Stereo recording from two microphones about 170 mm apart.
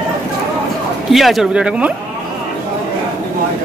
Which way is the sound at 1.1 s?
Centre (ahead or behind).